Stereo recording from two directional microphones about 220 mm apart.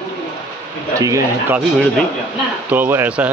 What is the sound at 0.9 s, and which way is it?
Speech, 15° right (ahead or behind).